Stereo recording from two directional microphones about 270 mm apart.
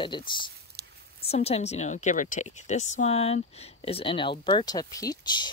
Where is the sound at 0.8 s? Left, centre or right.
Right.